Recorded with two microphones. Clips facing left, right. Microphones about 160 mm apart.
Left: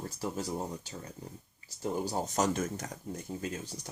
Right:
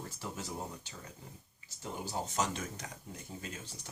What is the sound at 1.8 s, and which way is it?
Speech, 45° left (ahead or behind).